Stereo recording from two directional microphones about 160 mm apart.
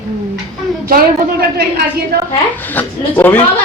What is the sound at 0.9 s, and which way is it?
Speech, 70° right (ahead or behind).